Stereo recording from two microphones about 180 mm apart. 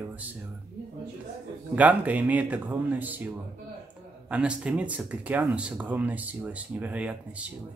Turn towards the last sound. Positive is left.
turn(degrees=-5)  # may be behind; listen again after turning